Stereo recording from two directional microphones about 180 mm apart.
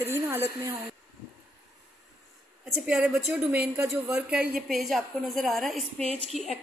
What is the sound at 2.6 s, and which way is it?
A woman's voice, centre (ahead or behind).